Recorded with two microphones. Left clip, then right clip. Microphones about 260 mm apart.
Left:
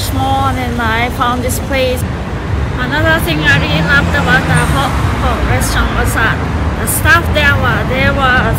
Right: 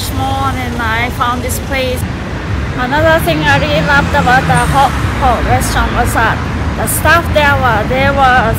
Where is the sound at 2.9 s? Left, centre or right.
Centre.